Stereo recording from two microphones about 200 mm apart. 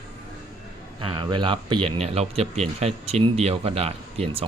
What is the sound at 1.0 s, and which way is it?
Speech, 25° right (ahead or behind).